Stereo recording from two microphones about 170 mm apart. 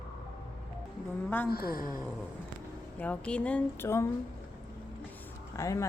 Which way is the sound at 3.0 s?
10° left (ahead or behind).